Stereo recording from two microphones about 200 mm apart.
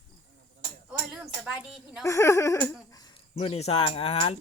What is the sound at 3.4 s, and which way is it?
Speech, 30° left (ahead or behind).